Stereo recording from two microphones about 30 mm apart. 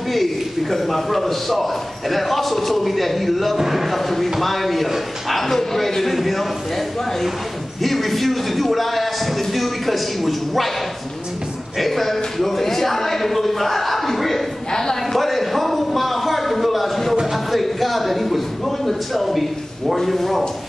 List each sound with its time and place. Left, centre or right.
0.1 s a man's voice: centre
3.5 s a man's voice: centre
3.9 s a man's voice: centre
5.4 s a man's voice: centre
7.8 s a man's voice: centre
11.8 s a man's voice: centre
14.7 s a sound: left
15.1 s a sound: centre
19.9 s a man's voice: centre